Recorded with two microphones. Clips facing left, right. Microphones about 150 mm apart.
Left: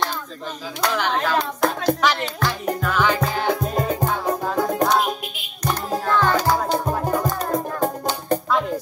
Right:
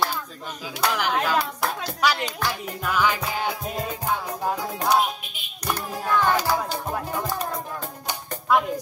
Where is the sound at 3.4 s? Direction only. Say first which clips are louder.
Left 7 dB; 50° left (ahead or behind).